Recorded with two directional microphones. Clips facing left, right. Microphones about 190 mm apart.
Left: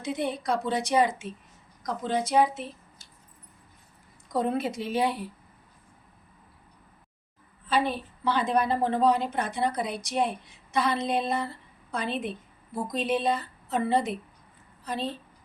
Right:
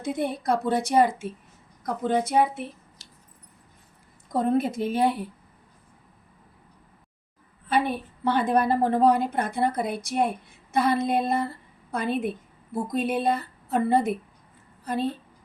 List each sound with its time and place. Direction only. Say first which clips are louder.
0.0 s a woman's voice: right 2 dB; 55° right (ahead or behind)
4.3 s speech: right 4 dB; 50° right (ahead or behind)
7.7 s a woman's voice: right 2 dB; 55° right (ahead or behind)